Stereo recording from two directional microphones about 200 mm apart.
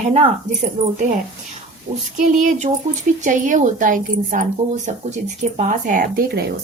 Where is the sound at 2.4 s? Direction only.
35° right (ahead or behind).